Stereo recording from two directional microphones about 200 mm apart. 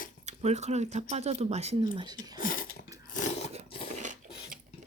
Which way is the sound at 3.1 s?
40° left (ahead or behind).